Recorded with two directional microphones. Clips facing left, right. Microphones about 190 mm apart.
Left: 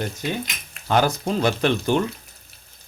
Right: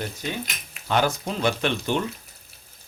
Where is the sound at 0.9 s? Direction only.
40° left (ahead or behind).